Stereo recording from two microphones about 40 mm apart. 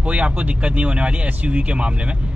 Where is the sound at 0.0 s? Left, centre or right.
Right.